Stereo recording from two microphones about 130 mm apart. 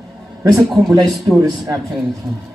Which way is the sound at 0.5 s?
Centre (ahead or behind).